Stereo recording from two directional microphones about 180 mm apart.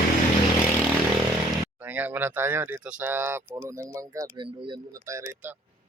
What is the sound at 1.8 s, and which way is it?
Speech, 10° right (ahead or behind).